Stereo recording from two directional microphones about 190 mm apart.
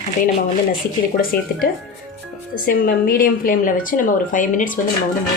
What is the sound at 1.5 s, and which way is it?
A woman's voice, 50° left (ahead or behind).